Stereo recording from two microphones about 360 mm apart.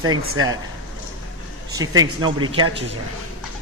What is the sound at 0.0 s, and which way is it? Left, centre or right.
Speech, right.